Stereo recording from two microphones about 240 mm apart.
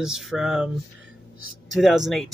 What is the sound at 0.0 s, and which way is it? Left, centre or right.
Speech, centre.